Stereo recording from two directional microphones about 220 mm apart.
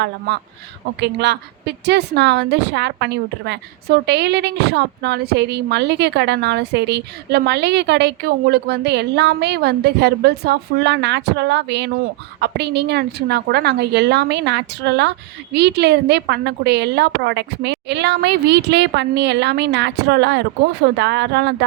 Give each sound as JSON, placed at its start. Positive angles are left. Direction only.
{"t": 0.9, "sound": "a woman's voice", "side_deg": -50}